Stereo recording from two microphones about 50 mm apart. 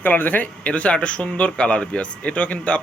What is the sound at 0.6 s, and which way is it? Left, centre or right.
Speech, left.